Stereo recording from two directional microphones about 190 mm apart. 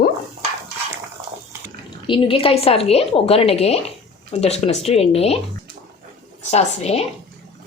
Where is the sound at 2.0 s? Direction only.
25° left (ahead or behind).